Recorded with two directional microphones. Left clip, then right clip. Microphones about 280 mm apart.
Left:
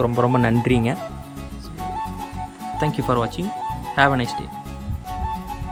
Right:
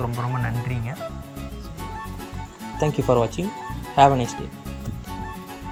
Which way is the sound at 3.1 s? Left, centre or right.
Centre.